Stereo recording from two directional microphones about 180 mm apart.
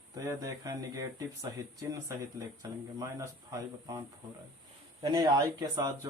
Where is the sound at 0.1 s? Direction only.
20° right (ahead or behind).